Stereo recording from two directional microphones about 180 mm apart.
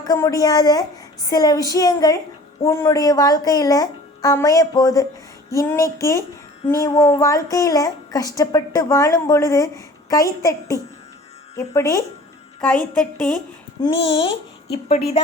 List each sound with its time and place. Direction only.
0.0 s a woman's voice: 20° left (ahead or behind)
13.8 s a woman's voice: 20° left (ahead or behind)
14.7 s a woman's voice: 35° left (ahead or behind)